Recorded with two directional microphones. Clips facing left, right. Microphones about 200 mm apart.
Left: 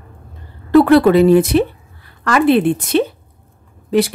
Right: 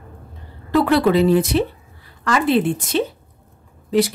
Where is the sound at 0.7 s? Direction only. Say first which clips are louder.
Left 6 dB; 50° left (ahead or behind).